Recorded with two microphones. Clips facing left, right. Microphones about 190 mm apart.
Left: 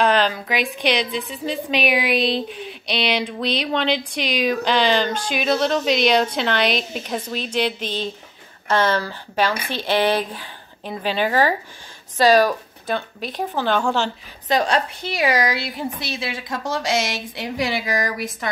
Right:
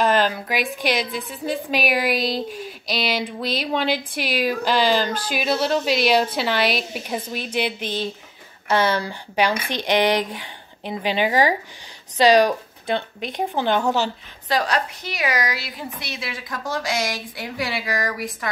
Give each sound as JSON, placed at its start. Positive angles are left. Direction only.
{"t": 0.5, "sound": "a woman's voice", "side_deg": 0}
{"t": 14.5, "sound": "a woman's voice", "side_deg": 25}